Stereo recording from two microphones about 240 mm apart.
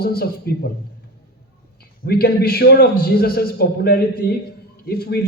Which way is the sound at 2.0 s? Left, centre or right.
Left.